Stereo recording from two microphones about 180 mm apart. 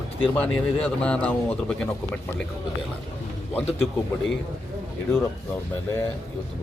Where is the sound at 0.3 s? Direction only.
5° left (ahead or behind).